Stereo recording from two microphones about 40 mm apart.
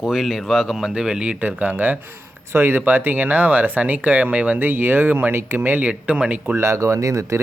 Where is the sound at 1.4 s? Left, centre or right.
Right.